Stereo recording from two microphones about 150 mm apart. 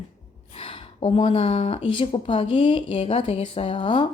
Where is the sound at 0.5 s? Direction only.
35° left (ahead or behind).